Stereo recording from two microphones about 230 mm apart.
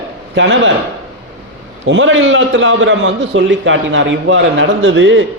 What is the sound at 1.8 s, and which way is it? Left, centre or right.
A man's voice, right.